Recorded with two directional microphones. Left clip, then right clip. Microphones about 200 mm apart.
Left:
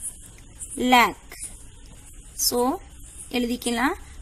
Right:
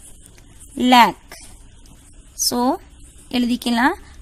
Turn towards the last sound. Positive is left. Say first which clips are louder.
# right 6 dB
turn(degrees=-55)  # may be behind; listen again after turning